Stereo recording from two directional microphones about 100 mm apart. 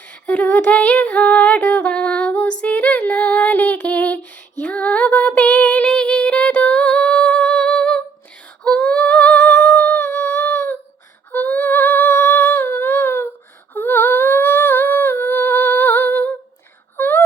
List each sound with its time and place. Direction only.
0.1 s a sound: 15° left (ahead or behind)
8.6 s humming: 10° left (ahead or behind)
17.0 s wail: 20° left (ahead or behind)